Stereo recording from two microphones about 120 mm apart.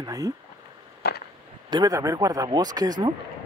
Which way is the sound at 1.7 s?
30° right (ahead or behind).